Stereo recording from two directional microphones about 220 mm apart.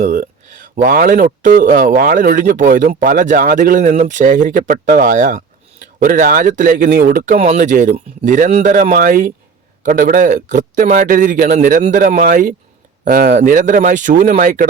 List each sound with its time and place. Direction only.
0.0 s speech: 35° right (ahead or behind)